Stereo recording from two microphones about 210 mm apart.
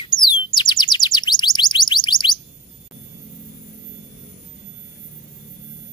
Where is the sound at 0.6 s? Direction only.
20° left (ahead or behind).